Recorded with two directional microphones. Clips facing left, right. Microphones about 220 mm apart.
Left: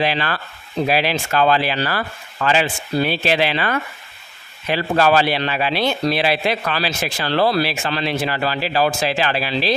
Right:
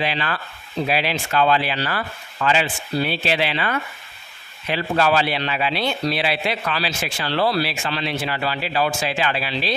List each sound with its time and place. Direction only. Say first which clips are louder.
0.1 s a man's voice: left 3 dB; 40° left (ahead or behind)